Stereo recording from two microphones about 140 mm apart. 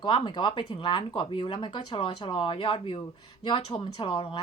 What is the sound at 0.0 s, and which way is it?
A woman's voice, 35° left (ahead or behind).